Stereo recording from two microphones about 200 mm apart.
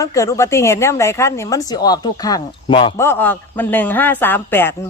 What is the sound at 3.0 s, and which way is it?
A woman's voice, 10° left (ahead or behind).